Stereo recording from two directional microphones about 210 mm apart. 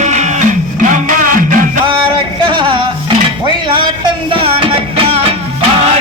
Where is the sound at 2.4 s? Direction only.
25° right (ahead or behind).